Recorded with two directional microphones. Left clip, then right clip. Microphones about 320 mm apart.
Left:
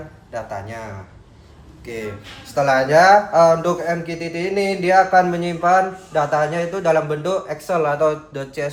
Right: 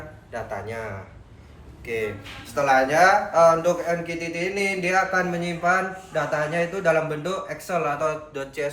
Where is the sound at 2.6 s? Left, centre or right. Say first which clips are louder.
Left 5 dB; left.